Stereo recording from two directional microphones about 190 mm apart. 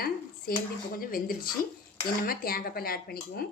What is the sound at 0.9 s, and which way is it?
Speech, 50° left (ahead or behind).